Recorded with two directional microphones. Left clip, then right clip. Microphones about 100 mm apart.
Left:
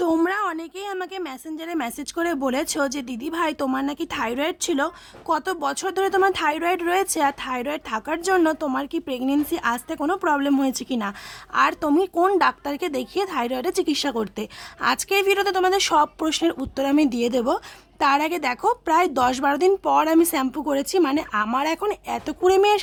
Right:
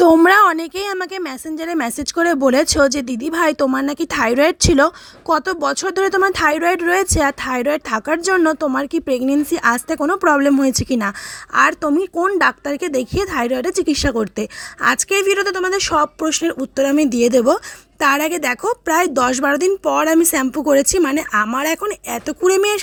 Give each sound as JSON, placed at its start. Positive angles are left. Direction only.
{"t": 0.0, "sound": "a woman's voice", "side_deg": -90}
{"t": 5.3, "sound": "a woman's voice", "side_deg": -40}
{"t": 11.5, "sound": "speech", "side_deg": -35}
{"t": 11.8, "sound": "speech", "side_deg": -20}